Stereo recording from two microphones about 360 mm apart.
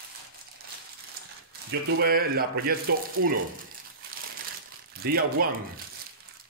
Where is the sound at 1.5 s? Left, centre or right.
Right.